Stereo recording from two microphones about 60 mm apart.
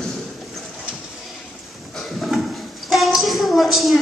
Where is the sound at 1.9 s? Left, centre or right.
Centre.